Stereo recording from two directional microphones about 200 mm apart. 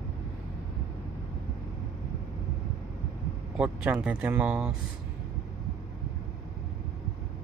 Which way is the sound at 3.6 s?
5° right (ahead or behind).